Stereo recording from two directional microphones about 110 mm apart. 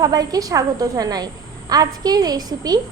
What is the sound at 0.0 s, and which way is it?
A woman's voice, 35° right (ahead or behind).